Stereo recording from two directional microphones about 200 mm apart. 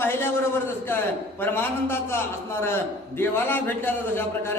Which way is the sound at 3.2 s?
10° left (ahead or behind).